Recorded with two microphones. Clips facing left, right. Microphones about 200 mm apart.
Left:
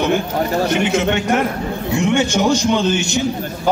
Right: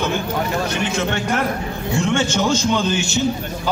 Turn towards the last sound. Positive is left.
turn(degrees=15)  # may be behind; listen again after turning